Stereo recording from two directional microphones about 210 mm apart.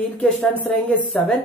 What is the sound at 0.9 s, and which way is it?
Speech, 5° left (ahead or behind).